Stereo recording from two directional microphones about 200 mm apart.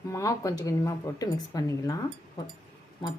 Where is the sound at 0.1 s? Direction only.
15° left (ahead or behind).